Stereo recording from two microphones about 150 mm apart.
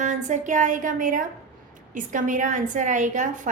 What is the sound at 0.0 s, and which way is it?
A woman's voice, 55° right (ahead or behind).